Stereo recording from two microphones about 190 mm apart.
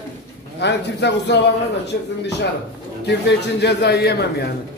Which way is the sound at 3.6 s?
60° left (ahead or behind).